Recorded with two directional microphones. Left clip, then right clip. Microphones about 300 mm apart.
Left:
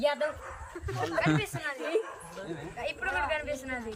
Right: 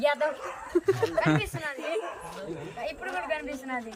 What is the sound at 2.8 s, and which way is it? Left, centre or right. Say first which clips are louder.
Speech: left 3 dB; centre.